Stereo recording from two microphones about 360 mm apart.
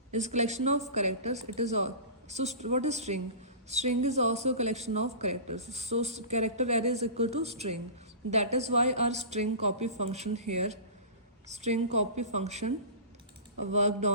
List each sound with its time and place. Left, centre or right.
0.1 s speech: centre
13.7 s speech: centre